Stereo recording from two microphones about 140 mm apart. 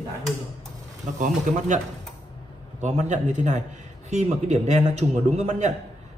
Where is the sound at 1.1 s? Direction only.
65° right (ahead or behind).